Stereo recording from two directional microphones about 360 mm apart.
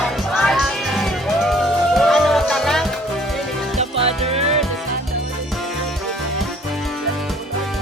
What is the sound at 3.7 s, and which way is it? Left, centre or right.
Music, centre.